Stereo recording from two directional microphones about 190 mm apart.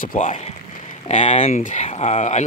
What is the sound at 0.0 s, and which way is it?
Speech, 45° left (ahead or behind).